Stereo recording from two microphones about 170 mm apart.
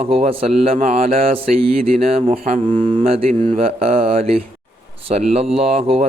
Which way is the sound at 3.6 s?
35° right (ahead or behind).